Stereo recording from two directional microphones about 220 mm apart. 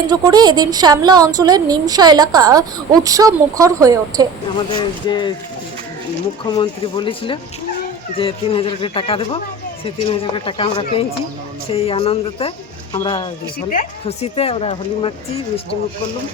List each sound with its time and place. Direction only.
0.1 s a woman's voice: 20° right (ahead or behind)
5.0 s speech: 20° left (ahead or behind)
6.4 s speech: 20° left (ahead or behind)
13.7 s speech: 35° left (ahead or behind)